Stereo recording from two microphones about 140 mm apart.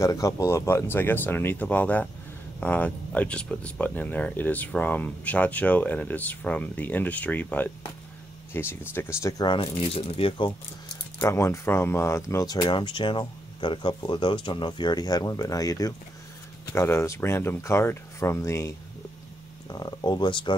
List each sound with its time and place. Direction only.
0.0 s speech: 25° left (ahead or behind)
9.4 s speech: 35° left (ahead or behind)
11.1 s speech: 20° left (ahead or behind)
19.7 s speech: 30° left (ahead or behind)